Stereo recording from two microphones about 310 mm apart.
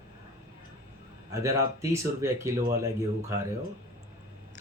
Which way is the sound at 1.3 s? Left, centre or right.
Centre.